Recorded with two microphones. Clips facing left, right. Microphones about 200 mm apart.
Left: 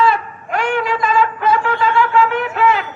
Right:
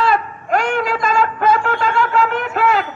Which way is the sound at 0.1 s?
40° right (ahead or behind).